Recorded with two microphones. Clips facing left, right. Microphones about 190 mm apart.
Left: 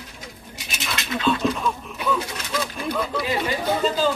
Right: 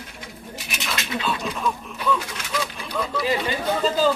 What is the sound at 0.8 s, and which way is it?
Speech, 5° right (ahead or behind).